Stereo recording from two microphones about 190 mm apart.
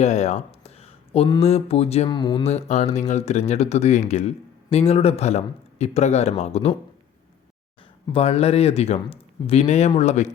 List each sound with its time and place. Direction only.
0.0 s speech: 35° left (ahead or behind)
8.1 s speech: 30° left (ahead or behind)